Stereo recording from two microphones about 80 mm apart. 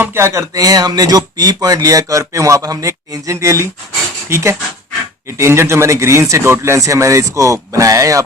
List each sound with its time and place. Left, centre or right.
0.0 s a man's voice: right